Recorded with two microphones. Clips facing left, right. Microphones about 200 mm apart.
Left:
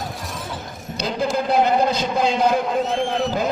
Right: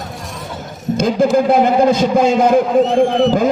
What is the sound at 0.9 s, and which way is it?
A man's voice, 50° right (ahead or behind).